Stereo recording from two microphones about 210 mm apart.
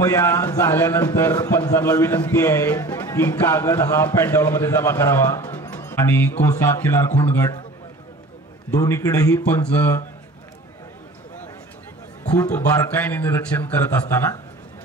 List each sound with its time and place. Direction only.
0.0 s a man's voice: 10° left (ahead or behind)
8.7 s a man's voice: 15° left (ahead or behind)
12.3 s a man's voice: 5° left (ahead or behind)